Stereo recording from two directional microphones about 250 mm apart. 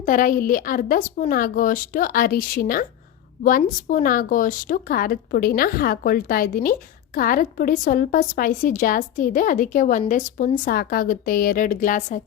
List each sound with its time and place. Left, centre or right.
0.0 s a woman's voice: left